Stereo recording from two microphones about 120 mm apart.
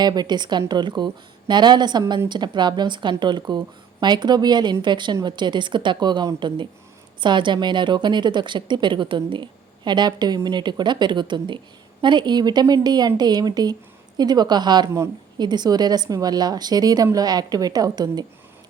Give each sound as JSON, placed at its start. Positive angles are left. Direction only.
{"t": 0.0, "sound": "a woman's voice", "side_deg": -35}